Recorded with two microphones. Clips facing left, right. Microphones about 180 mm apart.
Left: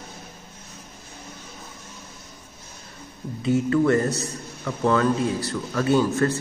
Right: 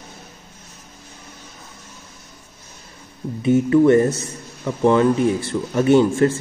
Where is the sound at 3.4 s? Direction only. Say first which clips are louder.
Right 6 dB; 25° right (ahead or behind).